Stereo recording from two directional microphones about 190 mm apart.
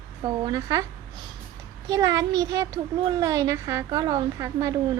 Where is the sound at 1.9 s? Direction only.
20° right (ahead or behind).